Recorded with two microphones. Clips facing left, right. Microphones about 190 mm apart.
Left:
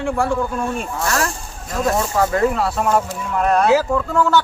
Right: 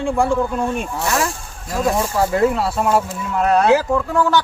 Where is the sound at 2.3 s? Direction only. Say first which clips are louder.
Right 1 dB; 10° right (ahead or behind).